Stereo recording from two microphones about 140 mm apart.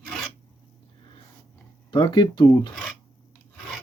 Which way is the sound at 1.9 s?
35° left (ahead or behind).